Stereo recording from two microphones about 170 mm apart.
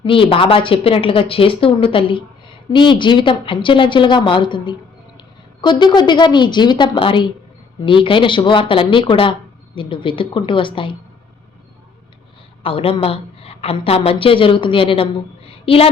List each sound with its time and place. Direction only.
0.0 s speech: 30° left (ahead or behind)
12.6 s a woman's voice: 35° left (ahead or behind)